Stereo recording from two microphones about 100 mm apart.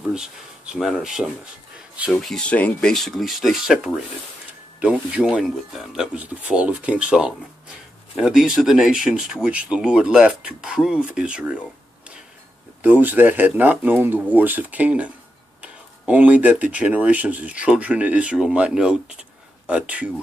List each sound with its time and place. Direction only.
0.0 s speech: 5° right (ahead or behind)
2.1 s speech: 5° left (ahead or behind); by 11.6 s 10° right (ahead or behind)
12.8 s speech: 15° right (ahead or behind)